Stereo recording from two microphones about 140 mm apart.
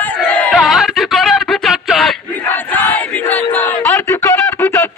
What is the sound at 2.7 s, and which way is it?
Battle cry, 10° left (ahead or behind).